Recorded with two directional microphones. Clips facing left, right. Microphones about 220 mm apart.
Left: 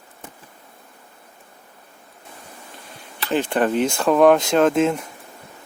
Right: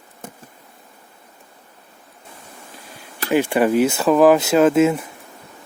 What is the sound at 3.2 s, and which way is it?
Speech, 10° right (ahead or behind).